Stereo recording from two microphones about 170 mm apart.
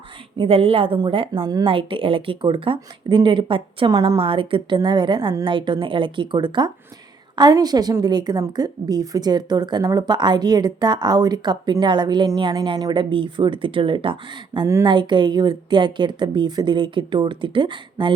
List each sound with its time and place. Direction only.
0.3 s a woman's voice: 35° right (ahead or behind)